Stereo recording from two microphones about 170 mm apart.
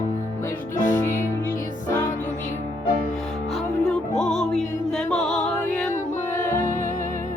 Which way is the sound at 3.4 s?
Centre (ahead or behind).